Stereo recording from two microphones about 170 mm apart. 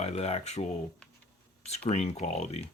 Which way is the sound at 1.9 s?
40° left (ahead or behind).